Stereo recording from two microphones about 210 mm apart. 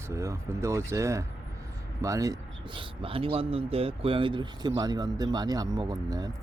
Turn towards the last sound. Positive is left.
turn(degrees=-15)  # may be behind; listen again after turning